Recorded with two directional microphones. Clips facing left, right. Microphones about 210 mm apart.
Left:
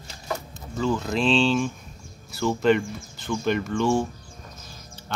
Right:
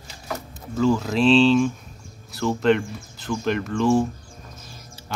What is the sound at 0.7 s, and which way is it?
Speech, centre (ahead or behind).